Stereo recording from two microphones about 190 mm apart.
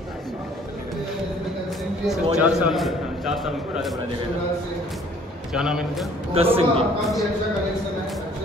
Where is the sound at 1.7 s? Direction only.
Centre (ahead or behind).